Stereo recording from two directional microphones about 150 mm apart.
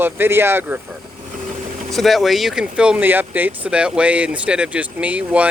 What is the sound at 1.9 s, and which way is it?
Speech, centre (ahead or behind).